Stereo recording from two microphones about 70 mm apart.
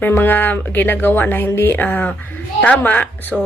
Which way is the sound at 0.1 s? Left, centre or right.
Left.